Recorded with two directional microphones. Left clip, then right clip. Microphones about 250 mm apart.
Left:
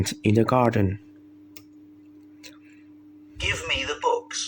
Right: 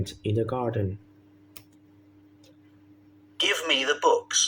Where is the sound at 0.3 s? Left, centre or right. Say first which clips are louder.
Left 7 dB; left.